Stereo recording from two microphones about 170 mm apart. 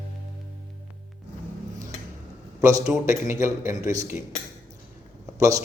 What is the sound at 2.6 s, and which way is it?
A man's voice, 20° right (ahead or behind).